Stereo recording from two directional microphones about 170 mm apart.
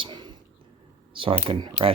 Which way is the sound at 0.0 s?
25° right (ahead or behind).